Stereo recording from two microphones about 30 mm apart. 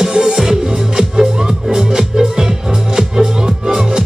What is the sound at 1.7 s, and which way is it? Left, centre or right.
Music, right.